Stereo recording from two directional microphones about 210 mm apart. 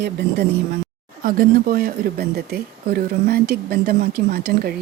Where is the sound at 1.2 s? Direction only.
40° right (ahead or behind).